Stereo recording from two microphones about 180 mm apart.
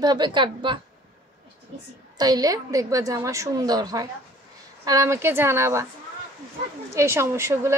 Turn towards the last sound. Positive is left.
turn(degrees=-15)  # may be behind; listen again after turning